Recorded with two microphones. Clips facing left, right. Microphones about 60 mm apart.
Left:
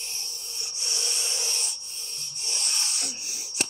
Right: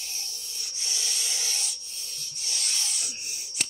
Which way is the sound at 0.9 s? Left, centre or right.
Left.